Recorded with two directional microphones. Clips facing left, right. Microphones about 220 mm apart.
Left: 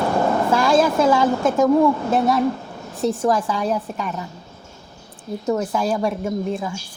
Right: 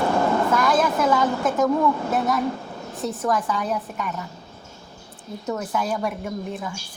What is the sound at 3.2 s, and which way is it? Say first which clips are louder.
Speech: left 4 dB; 30° left (ahead or behind).